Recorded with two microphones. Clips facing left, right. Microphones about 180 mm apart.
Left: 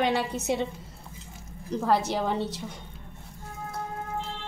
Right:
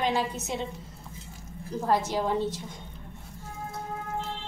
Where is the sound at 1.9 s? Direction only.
70° left (ahead or behind).